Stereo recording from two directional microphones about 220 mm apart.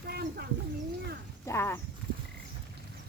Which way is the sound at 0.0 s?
45° right (ahead or behind).